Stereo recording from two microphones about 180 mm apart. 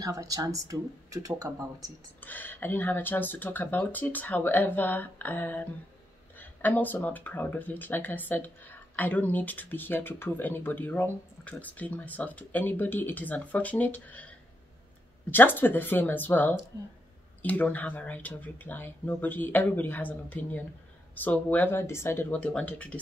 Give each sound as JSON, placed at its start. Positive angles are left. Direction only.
{"t": 0.0, "sound": "speech", "side_deg": -20}
{"t": 2.1, "sound": "speech", "side_deg": 10}
{"t": 15.3, "sound": "speech", "side_deg": 10}